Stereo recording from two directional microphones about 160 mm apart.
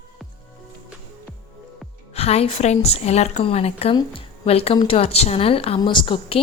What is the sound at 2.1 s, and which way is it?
A woman's voice, 40° left (ahead or behind).